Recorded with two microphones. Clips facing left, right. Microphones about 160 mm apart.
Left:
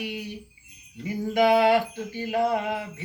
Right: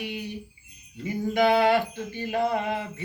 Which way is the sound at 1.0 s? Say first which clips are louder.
Left 1 dB; 10° left (ahead or behind).